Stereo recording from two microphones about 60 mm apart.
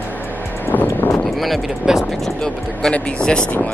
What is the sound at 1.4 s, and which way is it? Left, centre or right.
Speech, centre.